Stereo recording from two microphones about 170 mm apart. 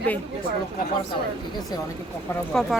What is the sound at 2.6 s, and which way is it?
Speech, centre (ahead or behind).